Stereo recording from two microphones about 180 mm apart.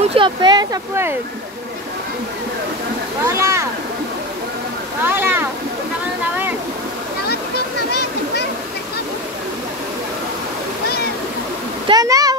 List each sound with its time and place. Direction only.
0.1 s speech: 25° right (ahead or behind)
3.3 s speech: 15° right (ahead or behind)
5.0 s speech: 10° right (ahead or behind)
7.9 s a sound: 65° left (ahead or behind)
11.9 s speech: 20° right (ahead or behind)